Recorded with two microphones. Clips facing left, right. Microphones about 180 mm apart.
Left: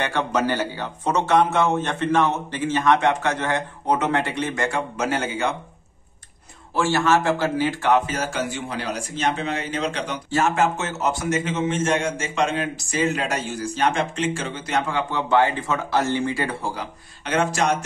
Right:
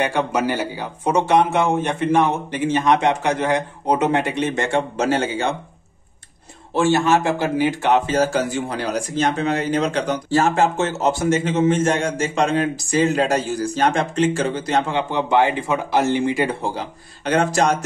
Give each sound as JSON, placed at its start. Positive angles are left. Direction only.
{"t": 0.0, "sound": "speech", "side_deg": -10}
{"t": 6.7, "sound": "a man's voice", "side_deg": -20}
{"t": 8.1, "sound": "speech", "side_deg": -35}
{"t": 17.2, "sound": "speech", "side_deg": -35}